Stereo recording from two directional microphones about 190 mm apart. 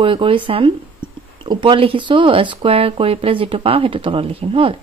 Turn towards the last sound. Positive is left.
turn(degrees=-30)  # may be behind; listen again after turning